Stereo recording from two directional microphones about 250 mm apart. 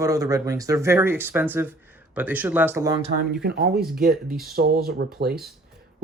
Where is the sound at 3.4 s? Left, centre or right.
Right.